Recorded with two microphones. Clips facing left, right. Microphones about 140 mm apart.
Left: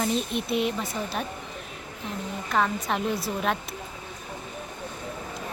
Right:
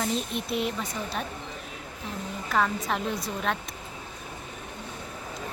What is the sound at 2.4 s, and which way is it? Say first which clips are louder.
A woman's voice: left 1 dB; centre (ahead or behind).